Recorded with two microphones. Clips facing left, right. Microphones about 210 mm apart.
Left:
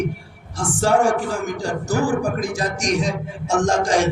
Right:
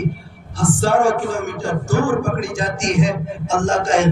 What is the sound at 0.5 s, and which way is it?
Speech, 40° left (ahead or behind).